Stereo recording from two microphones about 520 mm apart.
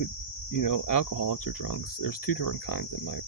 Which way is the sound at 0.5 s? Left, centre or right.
Left.